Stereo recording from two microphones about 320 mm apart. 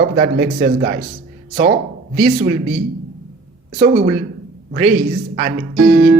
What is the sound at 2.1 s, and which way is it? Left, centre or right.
A man's voice, right.